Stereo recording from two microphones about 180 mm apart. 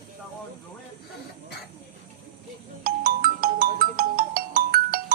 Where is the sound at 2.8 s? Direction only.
55° right (ahead or behind).